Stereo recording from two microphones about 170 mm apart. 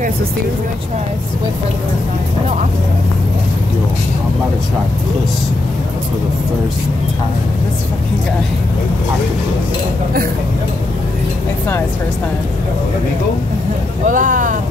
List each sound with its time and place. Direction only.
14.0 s speech: 50° right (ahead or behind)